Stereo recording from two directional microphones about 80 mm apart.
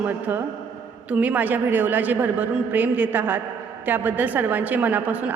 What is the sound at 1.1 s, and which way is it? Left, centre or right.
A woman's voice, centre.